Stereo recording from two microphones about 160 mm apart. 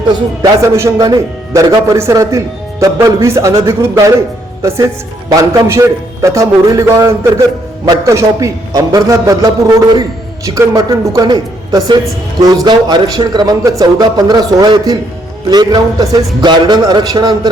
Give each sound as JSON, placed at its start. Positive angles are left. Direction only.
{"t": 0.1, "sound": "a man's voice", "side_deg": -20}